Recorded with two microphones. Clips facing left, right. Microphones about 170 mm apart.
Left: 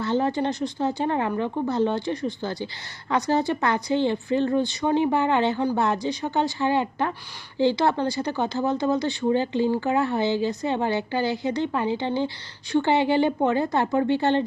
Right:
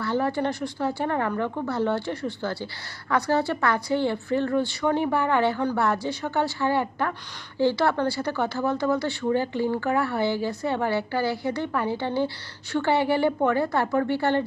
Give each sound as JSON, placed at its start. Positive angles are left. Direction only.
{"t": 0.0, "sound": "speech", "side_deg": 20}